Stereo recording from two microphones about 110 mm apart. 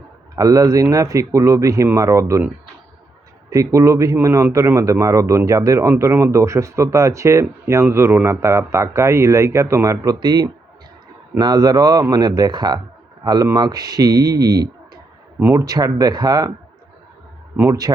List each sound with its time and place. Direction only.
0.3 s speech: 30° right (ahead or behind)
3.5 s speech: 30° right (ahead or behind)
10.2 s speech: 40° right (ahead or behind)
17.9 s speech: 35° right (ahead or behind)